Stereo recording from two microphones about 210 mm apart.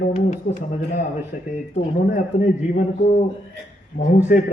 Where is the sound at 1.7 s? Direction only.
45° left (ahead or behind).